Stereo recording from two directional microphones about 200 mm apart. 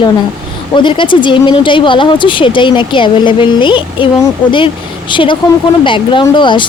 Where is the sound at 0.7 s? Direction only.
25° left (ahead or behind).